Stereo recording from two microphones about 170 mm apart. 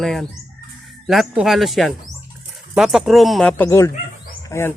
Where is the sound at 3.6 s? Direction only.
15° left (ahead or behind).